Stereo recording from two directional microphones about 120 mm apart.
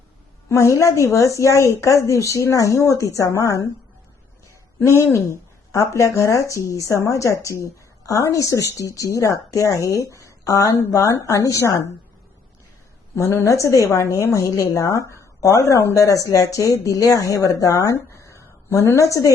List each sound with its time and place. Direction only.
0.4 s speech: 25° left (ahead or behind)
4.8 s speech: 20° left (ahead or behind)
13.1 s speech: 25° left (ahead or behind)